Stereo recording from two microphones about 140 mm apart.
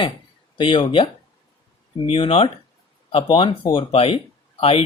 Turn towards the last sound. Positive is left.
turn(degrees=45)  # may be behind; listen again after turning